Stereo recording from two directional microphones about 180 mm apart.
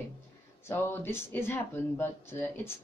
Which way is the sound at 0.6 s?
10° left (ahead or behind).